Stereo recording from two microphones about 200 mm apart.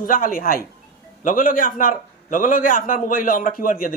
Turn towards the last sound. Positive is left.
turn(degrees=45)  # may be behind; listen again after turning